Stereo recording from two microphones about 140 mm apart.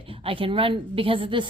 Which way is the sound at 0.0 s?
40° right (ahead or behind).